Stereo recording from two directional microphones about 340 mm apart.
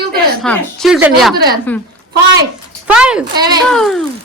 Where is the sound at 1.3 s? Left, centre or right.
Right.